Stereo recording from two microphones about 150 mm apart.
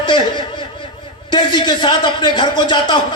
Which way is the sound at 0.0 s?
30° left (ahead or behind).